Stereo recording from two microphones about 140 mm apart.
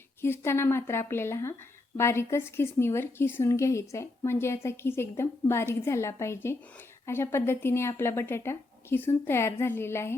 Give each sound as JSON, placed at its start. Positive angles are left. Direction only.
{"t": 0.2, "sound": "speech", "side_deg": 15}